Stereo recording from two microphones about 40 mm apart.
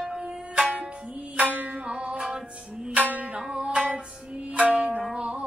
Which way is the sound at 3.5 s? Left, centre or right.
Right.